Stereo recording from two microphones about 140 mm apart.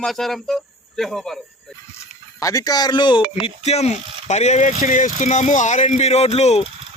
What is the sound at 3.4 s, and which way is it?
A man's voice, 50° left (ahead or behind).